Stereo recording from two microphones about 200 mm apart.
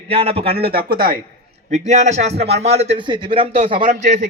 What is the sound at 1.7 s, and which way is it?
A man's voice, 35° right (ahead or behind).